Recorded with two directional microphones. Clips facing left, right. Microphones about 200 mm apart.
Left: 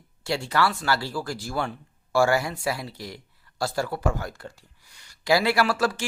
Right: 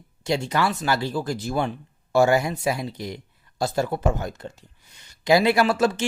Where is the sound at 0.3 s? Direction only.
20° right (ahead or behind).